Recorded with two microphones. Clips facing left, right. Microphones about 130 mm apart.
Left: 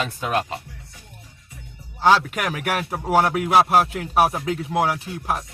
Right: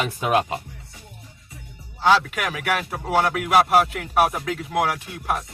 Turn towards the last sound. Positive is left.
turn(degrees=30)  # may be behind; listen again after turning